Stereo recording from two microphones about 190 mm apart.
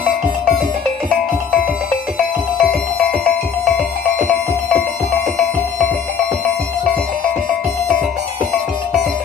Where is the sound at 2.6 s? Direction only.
5° left (ahead or behind).